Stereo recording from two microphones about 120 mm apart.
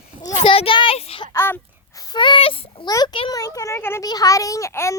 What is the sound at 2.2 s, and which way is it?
Speech, 45° left (ahead or behind).